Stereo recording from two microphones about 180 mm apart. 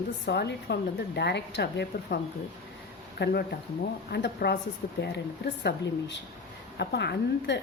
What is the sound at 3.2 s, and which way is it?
Speech, 60° left (ahead or behind).